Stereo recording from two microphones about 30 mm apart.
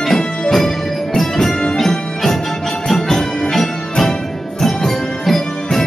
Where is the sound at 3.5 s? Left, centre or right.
Centre.